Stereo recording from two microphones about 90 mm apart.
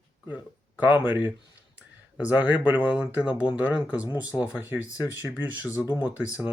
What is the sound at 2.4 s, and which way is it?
Speech, 20° right (ahead or behind).